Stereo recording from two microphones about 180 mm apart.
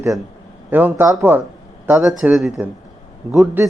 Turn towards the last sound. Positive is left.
turn(degrees=0)  # may be behind; listen again after turning